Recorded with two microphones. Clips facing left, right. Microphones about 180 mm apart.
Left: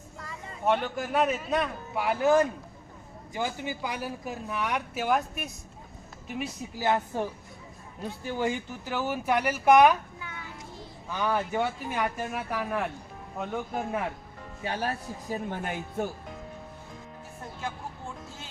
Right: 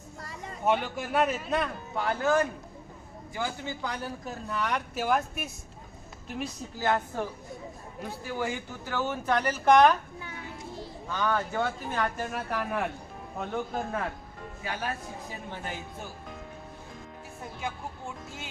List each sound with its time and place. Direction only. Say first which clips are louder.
0.6 s speech: left 1 dB; 5° right (ahead or behind)
2.1 s a man's voice: left 4 dB; 20° left (ahead or behind); by 6.5 s 5° left (ahead or behind)
6.7 s speech: left 1 dB; 15° left (ahead or behind)
11.1 s speech: left 1 dB; 15° left (ahead or behind)
14.6 s speech: left 3 dB; 30° left (ahead or behind)
15.4 s speech: left 4 dB; 55° left (ahead or behind)